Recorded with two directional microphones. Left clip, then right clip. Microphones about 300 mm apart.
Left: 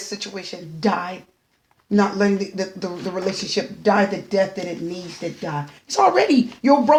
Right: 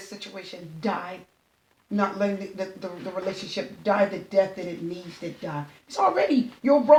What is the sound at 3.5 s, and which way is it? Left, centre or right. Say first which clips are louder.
Speech: left 6 dB; left.